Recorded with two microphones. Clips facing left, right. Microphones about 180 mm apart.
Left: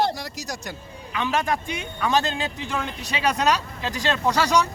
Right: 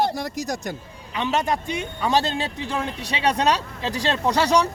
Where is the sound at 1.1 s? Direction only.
25° right (ahead or behind).